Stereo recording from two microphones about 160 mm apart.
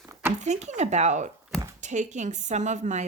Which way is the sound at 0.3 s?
45° right (ahead or behind).